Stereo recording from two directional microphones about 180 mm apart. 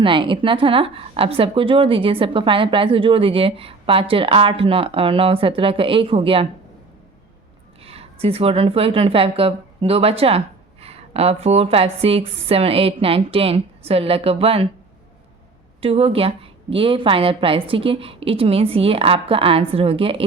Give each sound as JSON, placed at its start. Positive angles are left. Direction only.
{"t": 0.0, "sound": "a woman's voice", "side_deg": -25}
{"t": 7.9, "sound": "a woman's voice", "side_deg": -35}
{"t": 15.8, "sound": "a woman's voice", "side_deg": -35}